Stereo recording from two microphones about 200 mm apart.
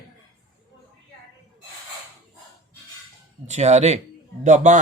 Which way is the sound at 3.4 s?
35° right (ahead or behind).